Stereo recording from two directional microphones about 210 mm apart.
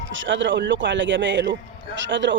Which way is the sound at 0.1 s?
60° right (ahead or behind).